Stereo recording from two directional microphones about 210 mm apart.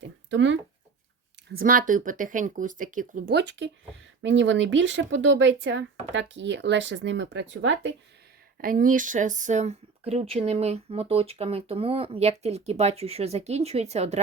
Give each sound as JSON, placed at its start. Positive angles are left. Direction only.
{"t": 0.0, "sound": "a sound", "side_deg": -60}
{"t": 1.5, "sound": "speech", "side_deg": -45}
{"t": 8.6, "sound": "speech", "side_deg": -40}